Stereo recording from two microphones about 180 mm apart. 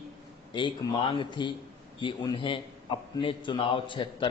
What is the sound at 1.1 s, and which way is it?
A man's voice, 25° left (ahead or behind).